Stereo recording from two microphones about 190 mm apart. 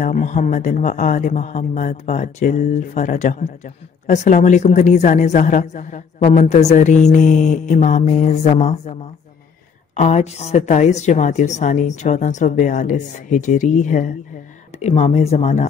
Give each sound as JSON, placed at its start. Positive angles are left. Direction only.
{"t": 0.0, "sound": "speech", "side_deg": 40}
{"t": 9.9, "sound": "speech", "side_deg": 35}